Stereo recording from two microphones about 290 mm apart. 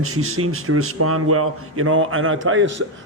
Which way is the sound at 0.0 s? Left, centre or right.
Right.